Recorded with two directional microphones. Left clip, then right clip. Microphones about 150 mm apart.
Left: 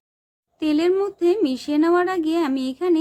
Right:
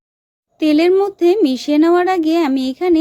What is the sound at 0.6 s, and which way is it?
Speech, 45° right (ahead or behind).